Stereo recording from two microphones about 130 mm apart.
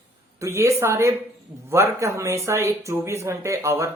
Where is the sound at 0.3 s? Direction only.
20° right (ahead or behind).